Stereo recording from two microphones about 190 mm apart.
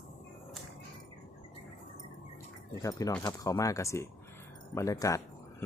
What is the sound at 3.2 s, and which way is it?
A man's voice, 20° left (ahead or behind).